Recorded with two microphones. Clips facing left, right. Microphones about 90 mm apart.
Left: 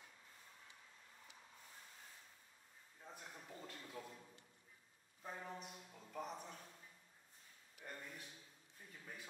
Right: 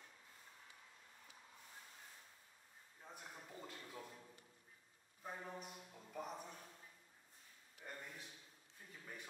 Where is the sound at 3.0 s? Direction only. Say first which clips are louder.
Even; 5° right (ahead or behind).